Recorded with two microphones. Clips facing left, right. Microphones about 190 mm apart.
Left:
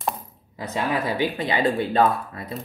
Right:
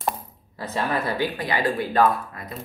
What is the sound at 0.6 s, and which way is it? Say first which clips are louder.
Speech: left 1 dB; 15° left (ahead or behind).